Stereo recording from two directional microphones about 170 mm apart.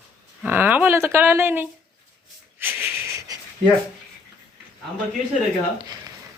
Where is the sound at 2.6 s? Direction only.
10° right (ahead or behind).